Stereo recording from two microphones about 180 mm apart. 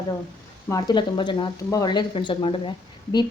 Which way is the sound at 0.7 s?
25° left (ahead or behind).